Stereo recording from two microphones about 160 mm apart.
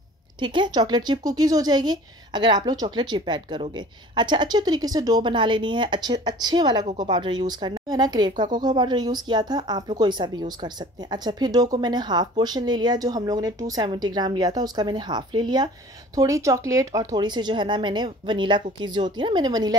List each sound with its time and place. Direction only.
0.4 s speech: 30° right (ahead or behind)